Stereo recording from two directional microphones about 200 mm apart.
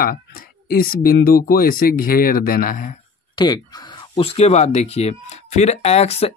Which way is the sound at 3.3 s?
20° left (ahead or behind).